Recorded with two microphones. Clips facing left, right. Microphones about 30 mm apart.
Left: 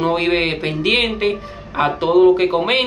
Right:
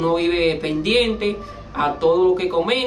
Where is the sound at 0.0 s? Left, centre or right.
Left.